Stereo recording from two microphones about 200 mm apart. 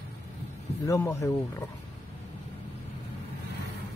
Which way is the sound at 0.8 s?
15° left (ahead or behind).